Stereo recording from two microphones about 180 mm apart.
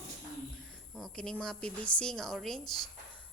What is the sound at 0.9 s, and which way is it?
A woman's voice, 5° left (ahead or behind).